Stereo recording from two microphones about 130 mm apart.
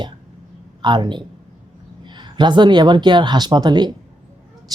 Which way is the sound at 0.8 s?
35° right (ahead or behind).